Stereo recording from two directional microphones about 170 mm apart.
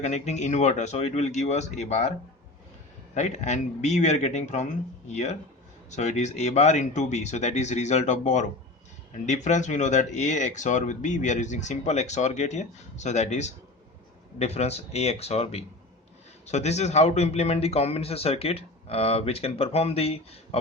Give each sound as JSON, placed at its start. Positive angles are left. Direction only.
{"t": 0.0, "sound": "a man's voice", "side_deg": 40}
{"t": 3.2, "sound": "a man's voice", "side_deg": 45}